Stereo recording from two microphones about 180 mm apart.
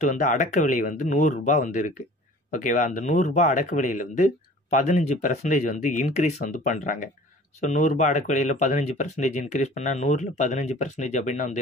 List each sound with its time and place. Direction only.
0.0 s speech: 45° left (ahead or behind)